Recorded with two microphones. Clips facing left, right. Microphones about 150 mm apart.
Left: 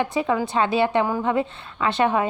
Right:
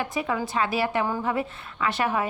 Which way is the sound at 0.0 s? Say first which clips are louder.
Left 5 dB; 25° left (ahead or behind).